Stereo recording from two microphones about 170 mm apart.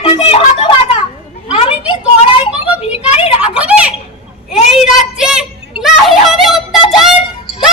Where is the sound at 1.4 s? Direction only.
35° left (ahead or behind).